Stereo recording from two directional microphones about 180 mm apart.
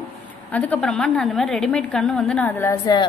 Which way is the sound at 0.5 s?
10° left (ahead or behind).